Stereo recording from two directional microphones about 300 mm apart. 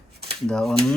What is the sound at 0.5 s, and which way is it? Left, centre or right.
Speech, centre.